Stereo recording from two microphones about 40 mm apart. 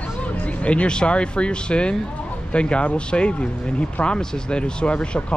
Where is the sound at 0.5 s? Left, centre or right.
Left.